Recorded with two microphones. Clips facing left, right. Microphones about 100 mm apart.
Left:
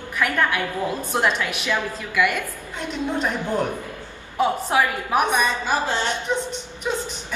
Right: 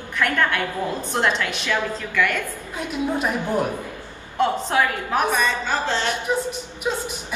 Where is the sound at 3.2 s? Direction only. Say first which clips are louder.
Even; 10° right (ahead or behind).